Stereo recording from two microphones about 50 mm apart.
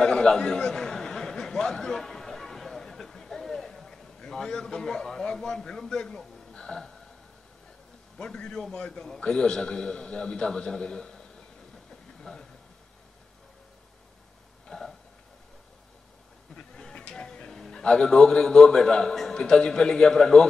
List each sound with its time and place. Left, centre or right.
0.0 s a sound: centre
6.5 s music: centre
8.2 s a man's voice: centre
14.7 s a sound: centre
16.5 s sheep: centre
17.8 s a man's voice: centre